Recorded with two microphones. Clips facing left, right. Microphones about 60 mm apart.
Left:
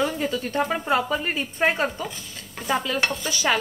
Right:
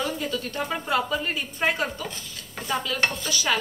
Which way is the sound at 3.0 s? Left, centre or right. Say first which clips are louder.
Left 1 dB; centre.